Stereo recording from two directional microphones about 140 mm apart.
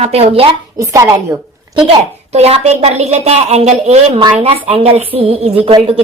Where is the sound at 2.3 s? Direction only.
50° right (ahead or behind).